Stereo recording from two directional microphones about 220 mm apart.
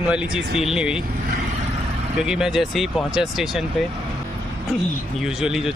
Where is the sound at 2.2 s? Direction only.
5° right (ahead or behind).